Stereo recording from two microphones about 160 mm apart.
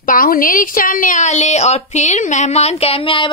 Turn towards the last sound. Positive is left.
turn(degrees=35)  # may be behind; listen again after turning